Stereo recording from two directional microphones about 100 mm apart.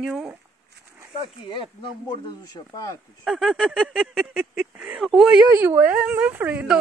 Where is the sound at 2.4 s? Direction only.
40° left (ahead or behind).